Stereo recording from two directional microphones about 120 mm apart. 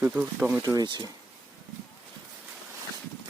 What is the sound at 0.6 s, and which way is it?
Speech, 35° right (ahead or behind).